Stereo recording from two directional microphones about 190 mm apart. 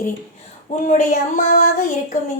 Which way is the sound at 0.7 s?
40° left (ahead or behind).